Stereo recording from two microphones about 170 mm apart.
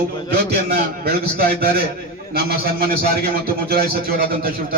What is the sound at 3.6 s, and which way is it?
Speech, 65° right (ahead or behind).